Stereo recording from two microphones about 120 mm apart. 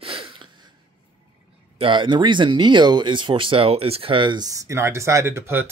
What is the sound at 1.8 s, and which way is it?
Speech, 45° right (ahead or behind).